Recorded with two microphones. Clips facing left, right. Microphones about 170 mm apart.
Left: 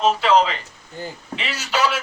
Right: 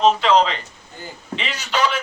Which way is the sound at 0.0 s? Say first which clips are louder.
Right 1 dB; 5° left (ahead or behind).